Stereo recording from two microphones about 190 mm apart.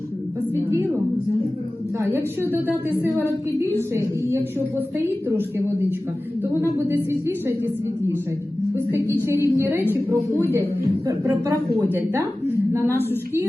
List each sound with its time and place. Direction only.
2.0 s a woman's voice: 10° right (ahead or behind)
6.4 s a woman's voice: 10° right (ahead or behind)
9.2 s a woman's voice: 15° right (ahead or behind)
12.5 s a sound: 15° right (ahead or behind)
13.1 s a woman's voice: 10° right (ahead or behind)